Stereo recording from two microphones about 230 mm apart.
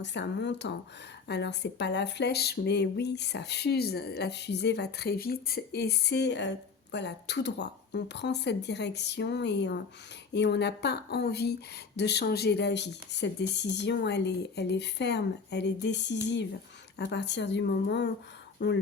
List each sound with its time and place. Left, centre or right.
0.0 s speech: left